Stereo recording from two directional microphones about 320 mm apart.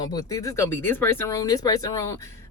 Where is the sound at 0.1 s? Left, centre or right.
Centre.